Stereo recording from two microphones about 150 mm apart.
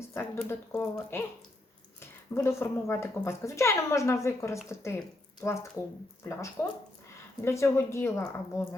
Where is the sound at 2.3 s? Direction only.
15° left (ahead or behind).